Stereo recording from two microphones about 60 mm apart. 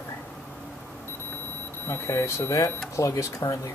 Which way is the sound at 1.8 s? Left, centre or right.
Left.